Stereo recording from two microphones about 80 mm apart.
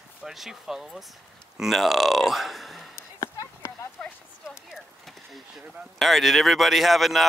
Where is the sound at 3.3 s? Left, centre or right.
Left.